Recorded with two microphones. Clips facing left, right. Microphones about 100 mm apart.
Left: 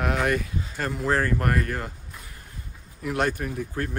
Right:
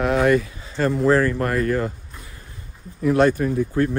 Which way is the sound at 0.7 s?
30° right (ahead or behind).